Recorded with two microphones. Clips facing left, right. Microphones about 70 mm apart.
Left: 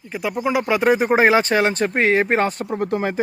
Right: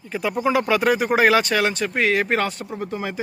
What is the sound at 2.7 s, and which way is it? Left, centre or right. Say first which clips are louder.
Speech: left 6 dB; left.